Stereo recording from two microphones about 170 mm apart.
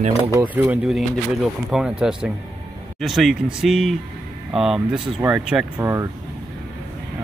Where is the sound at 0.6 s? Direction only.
5° right (ahead or behind).